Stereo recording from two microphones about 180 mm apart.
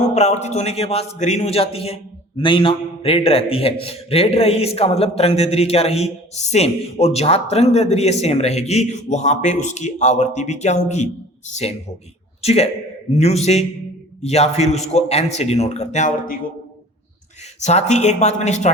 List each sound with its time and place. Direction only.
0.1 s a man's voice: 40° left (ahead or behind)
17.6 s a man's voice: 40° left (ahead or behind)